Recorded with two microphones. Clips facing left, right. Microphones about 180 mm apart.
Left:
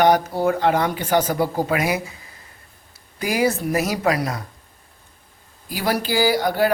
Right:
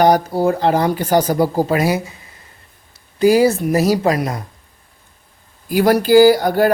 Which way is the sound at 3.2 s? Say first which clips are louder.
Right 8 dB; 30° right (ahead or behind).